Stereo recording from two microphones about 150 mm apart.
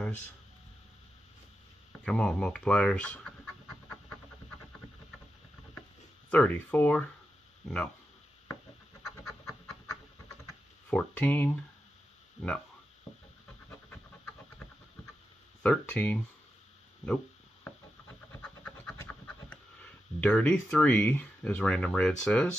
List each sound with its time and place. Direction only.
1.9 s speech: 5° left (ahead or behind)
6.3 s speech: 10° left (ahead or behind)
9.0 s pant: 20° left (ahead or behind)
11.0 s speech: 10° left (ahead or behind)
15.6 s speech: 10° left (ahead or behind)
18.4 s pant: 10° left (ahead or behind)
20.2 s speech: 10° left (ahead or behind)